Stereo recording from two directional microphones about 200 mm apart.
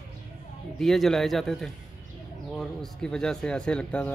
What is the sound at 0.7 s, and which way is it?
Speech, centre (ahead or behind).